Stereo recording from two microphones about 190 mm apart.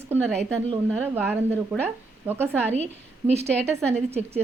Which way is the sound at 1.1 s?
10° right (ahead or behind).